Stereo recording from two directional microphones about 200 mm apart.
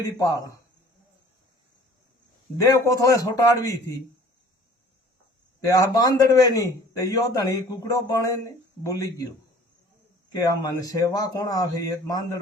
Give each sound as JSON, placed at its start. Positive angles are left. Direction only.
{"t": 0.0, "sound": "a man's voice", "side_deg": 15}
{"t": 2.6, "sound": "a man's voice", "side_deg": 15}
{"t": 5.6, "sound": "a man's voice", "side_deg": 20}
{"t": 10.3, "sound": "a man's voice", "side_deg": 20}